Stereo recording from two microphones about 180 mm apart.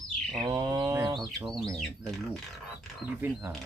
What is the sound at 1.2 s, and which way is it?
Speech, centre (ahead or behind).